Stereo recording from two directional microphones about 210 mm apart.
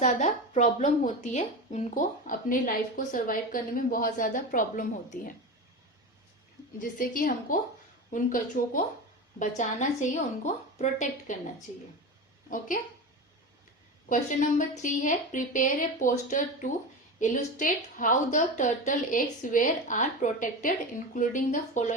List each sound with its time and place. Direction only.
0.0 s a woman's voice: 35° left (ahead or behind)
6.7 s a woman's voice: 40° left (ahead or behind)
12.5 s a woman's voice: 40° left (ahead or behind)
14.1 s a woman's voice: 40° left (ahead or behind)